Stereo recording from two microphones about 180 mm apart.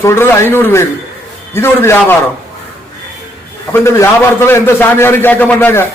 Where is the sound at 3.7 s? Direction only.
15° left (ahead or behind).